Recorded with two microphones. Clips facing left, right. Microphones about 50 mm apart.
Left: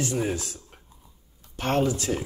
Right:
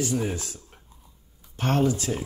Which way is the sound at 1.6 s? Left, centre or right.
Left.